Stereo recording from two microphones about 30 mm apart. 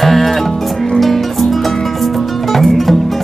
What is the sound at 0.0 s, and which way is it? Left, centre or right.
Music, centre.